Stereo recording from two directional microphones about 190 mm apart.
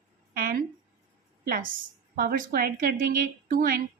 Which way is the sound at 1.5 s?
50° right (ahead or behind).